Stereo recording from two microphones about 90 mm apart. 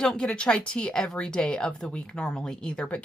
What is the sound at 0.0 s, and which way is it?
Speech, 10° left (ahead or behind).